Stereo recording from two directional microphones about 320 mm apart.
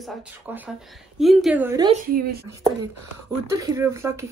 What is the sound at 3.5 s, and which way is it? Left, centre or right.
Speech, centre.